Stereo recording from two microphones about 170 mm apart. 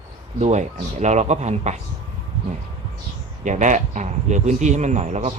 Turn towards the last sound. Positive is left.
turn(degrees=-40)  # may be behind; listen again after turning